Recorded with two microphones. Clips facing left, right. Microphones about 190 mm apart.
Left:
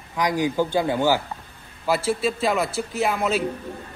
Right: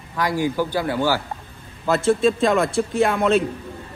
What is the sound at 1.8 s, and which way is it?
A man's voice, 10° left (ahead or behind).